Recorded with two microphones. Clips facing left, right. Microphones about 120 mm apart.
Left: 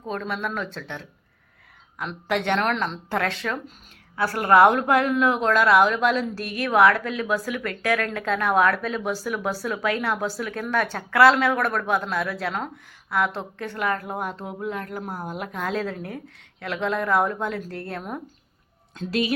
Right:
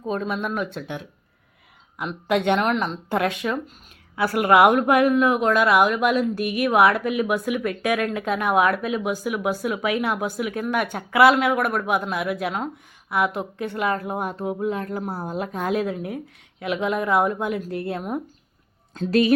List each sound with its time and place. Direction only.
0.0 s a woman's voice: 20° right (ahead or behind)
2.6 s a woman's voice: 5° right (ahead or behind); by 15.7 s 25° right (ahead or behind)
15.7 s a woman's voice: 15° right (ahead or behind)
18.9 s speech: 45° right (ahead or behind)